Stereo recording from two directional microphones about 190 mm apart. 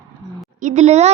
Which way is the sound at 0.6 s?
40° right (ahead or behind).